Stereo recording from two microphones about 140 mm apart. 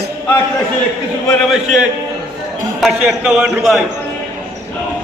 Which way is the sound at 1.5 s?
5° right (ahead or behind).